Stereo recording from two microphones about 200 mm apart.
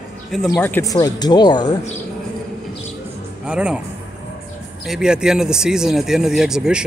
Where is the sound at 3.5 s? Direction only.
5° right (ahead or behind).